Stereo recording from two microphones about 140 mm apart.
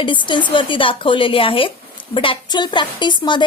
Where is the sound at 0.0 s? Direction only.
35° left (ahead or behind).